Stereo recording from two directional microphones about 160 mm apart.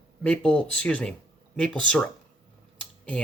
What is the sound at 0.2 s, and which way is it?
Speech, 5° left (ahead or behind).